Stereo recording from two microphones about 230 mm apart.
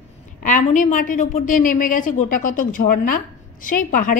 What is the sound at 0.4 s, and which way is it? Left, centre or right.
A woman's voice, left.